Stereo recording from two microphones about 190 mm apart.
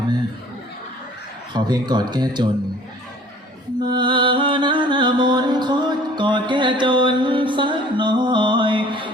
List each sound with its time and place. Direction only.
1.5 s speech: 20° right (ahead or behind)
3.8 s music: 25° right (ahead or behind)